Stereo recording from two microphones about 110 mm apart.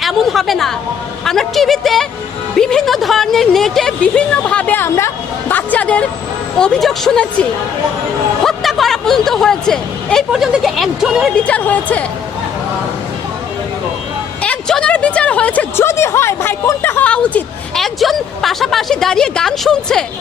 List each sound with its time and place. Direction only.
0.0 s a woman's voice: centre (ahead or behind)
8.4 s a sound: 5° left (ahead or behind)
10.3 s a woman's voice: 5° right (ahead or behind)
11.4 s speech: 15° left (ahead or behind)
14.4 s a sound: 10° left (ahead or behind)
15.7 s a woman's voice: 25° left (ahead or behind)
17.1 s a woman's voice: 10° left (ahead or behind)